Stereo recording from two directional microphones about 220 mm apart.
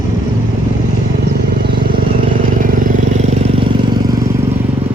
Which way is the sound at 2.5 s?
35° right (ahead or behind).